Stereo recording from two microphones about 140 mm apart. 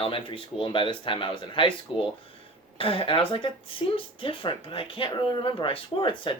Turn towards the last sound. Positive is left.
turn(degrees=40)  # may be behind; listen again after turning